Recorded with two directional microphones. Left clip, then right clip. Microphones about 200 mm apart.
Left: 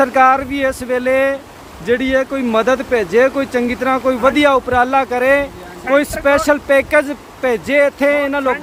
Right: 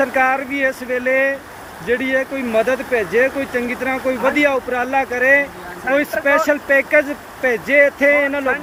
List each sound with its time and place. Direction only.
0.0 s speech: 20° left (ahead or behind)
5.9 s speech: 10° left (ahead or behind)
6.2 s speech: 25° left (ahead or behind)